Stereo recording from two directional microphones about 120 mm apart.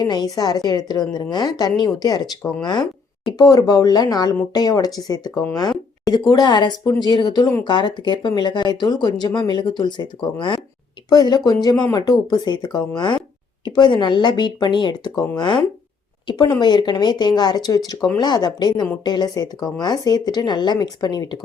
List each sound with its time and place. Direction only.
0.0 s speech: 35° left (ahead or behind)
2.4 s speech: 20° left (ahead or behind)
3.3 s speech: 35° left (ahead or behind)